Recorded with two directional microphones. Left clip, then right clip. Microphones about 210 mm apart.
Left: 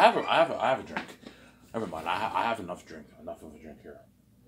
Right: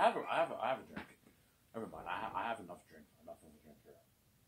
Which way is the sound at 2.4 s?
25° left (ahead or behind).